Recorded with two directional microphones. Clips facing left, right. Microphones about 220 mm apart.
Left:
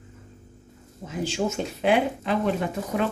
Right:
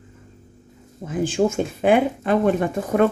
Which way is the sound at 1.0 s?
50° right (ahead or behind).